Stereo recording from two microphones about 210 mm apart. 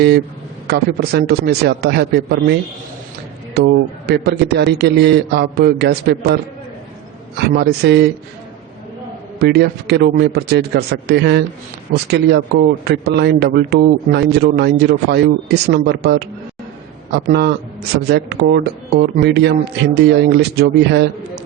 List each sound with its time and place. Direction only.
0.7 s a man's voice: 50° right (ahead or behind)
7.4 s a man's voice: 50° right (ahead or behind)
9.4 s a man's voice: 50° right (ahead or behind)